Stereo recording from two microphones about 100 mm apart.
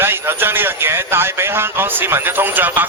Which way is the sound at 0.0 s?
25° right (ahead or behind).